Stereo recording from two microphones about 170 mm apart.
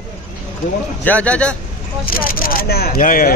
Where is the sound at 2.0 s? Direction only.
55° left (ahead or behind).